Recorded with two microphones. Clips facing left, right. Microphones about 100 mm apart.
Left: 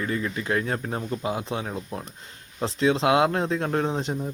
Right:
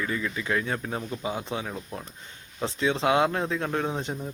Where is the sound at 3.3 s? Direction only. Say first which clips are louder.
Left 3 dB; 40° left (ahead or behind).